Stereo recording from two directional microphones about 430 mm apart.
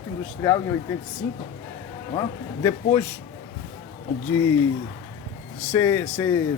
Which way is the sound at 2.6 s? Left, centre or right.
Centre.